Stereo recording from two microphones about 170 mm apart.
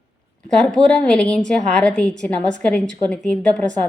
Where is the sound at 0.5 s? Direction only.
5° left (ahead or behind).